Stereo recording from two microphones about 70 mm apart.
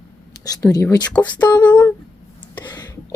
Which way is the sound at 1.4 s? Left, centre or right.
Left.